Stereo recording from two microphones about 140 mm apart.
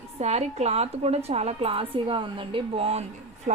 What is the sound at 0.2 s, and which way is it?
A woman's voice, 50° right (ahead or behind).